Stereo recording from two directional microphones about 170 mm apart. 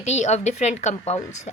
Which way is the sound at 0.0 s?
40° left (ahead or behind).